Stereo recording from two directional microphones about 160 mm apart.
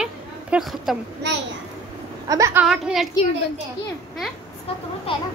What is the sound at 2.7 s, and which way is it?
Speech, centre (ahead or behind).